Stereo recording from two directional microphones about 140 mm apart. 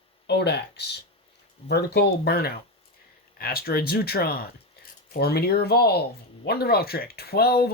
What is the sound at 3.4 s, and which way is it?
Speech, 90° left.